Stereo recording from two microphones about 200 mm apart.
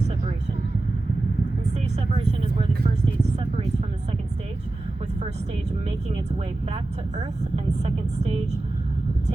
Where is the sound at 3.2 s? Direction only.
30° right (ahead or behind).